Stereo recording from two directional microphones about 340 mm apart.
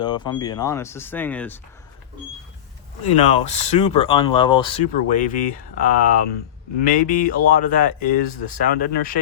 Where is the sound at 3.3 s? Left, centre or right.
Centre.